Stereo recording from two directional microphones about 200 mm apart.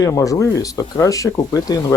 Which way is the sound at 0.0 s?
15° left (ahead or behind).